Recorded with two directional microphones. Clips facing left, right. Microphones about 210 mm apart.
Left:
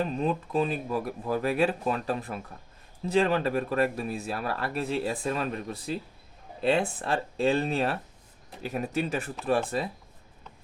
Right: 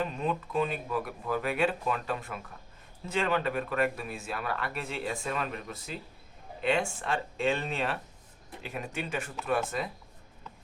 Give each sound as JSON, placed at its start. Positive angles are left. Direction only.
{"t": 0.0, "sound": "speech", "side_deg": 35}